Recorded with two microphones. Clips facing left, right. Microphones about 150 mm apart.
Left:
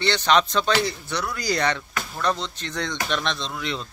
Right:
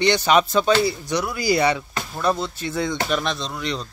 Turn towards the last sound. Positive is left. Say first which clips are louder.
# right 2 dB
turn(degrees=0)  # may be behind; listen again after turning